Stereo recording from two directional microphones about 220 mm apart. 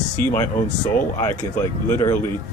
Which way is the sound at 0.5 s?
35° left (ahead or behind).